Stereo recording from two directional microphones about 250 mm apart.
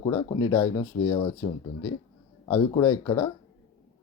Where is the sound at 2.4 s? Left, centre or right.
Centre.